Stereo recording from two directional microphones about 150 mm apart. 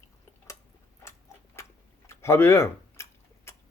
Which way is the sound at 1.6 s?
20° left (ahead or behind).